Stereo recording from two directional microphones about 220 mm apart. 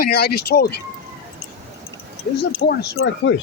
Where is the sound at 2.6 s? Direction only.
40° left (ahead or behind).